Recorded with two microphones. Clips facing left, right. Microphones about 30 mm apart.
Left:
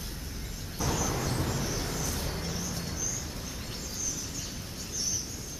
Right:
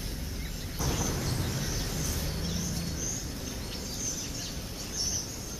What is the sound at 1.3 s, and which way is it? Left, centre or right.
Vehicle, left.